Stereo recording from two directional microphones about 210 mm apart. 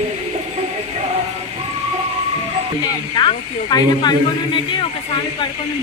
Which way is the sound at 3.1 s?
20° left (ahead or behind).